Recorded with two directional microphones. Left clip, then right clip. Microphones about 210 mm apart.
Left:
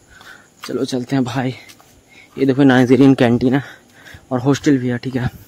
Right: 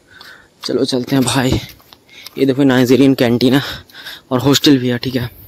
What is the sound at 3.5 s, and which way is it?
Speech, 20° right (ahead or behind).